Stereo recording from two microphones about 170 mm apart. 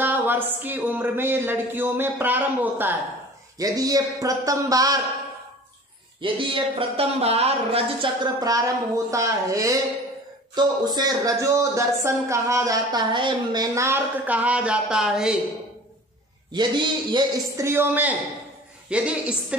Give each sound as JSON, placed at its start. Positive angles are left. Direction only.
{"t": 0.0, "sound": "speech", "side_deg": -10}
{"t": 6.2, "sound": "speech", "side_deg": -30}
{"t": 16.5, "sound": "speech", "side_deg": -25}